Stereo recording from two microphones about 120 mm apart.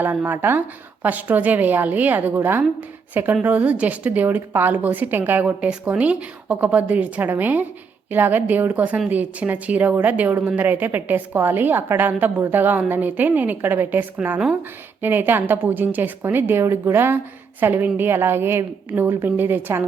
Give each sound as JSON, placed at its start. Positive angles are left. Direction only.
{"t": 0.0, "sound": "a woman's voice", "side_deg": -15}